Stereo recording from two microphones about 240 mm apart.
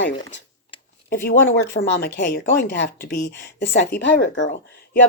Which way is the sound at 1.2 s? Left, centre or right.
Left.